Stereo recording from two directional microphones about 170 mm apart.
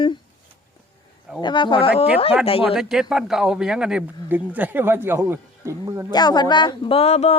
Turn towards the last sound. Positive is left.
turn(degrees=35)  # may be behind; listen again after turning